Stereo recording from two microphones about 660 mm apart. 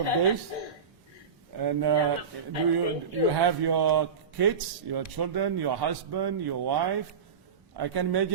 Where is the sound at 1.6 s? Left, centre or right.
Right.